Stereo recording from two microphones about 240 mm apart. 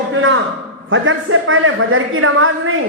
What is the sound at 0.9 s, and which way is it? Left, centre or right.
A woman's voice, right.